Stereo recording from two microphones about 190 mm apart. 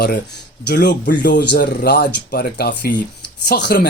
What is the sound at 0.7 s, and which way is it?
Speech, 65° left (ahead or behind).